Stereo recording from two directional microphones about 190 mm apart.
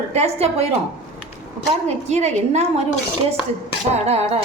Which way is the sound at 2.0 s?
35° right (ahead or behind).